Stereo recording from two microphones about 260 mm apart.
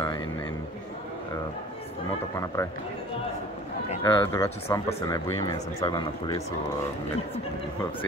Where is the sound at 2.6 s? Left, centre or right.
Centre.